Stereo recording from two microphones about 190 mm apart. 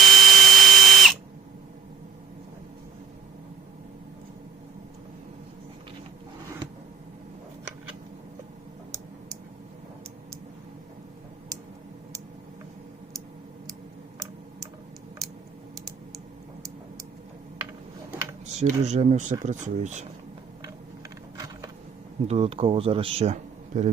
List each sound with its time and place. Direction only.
0.0 s drill: centre (ahead or behind)
18.6 s a man's voice: 35° right (ahead or behind)
21.3 s a sound: 20° right (ahead or behind)
22.3 s a man's voice: 30° right (ahead or behind)